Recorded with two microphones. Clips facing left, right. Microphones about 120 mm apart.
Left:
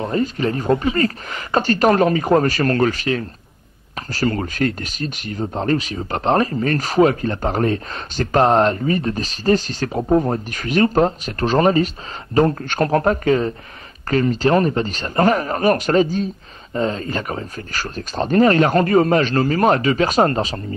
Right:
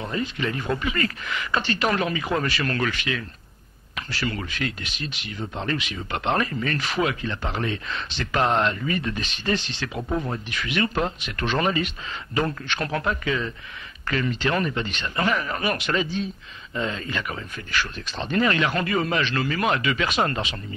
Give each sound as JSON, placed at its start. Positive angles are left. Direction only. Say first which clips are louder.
{"t": 0.1, "sound": "speech", "louder": "left 6 dB", "side_deg": 40}